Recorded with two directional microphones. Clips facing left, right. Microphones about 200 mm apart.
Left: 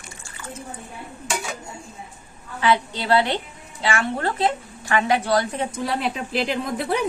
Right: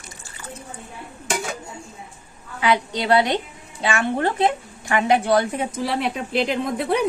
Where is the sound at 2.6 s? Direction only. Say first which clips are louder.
Right 1 dB; 15° right (ahead or behind).